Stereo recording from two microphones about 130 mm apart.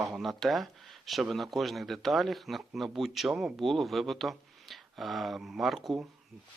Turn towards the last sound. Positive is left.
turn(degrees=-5)  # may be behind; listen again after turning